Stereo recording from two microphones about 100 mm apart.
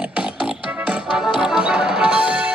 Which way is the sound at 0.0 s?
10° right (ahead or behind).